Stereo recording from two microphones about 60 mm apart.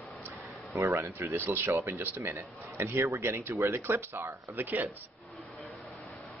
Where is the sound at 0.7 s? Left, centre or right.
Right.